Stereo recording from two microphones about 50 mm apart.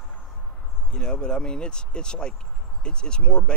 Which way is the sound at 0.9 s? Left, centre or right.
Centre.